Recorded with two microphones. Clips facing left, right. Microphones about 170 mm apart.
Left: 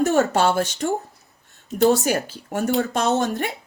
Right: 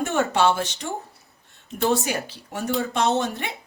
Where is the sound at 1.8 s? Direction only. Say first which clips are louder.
Left 5 dB; 40° left (ahead or behind).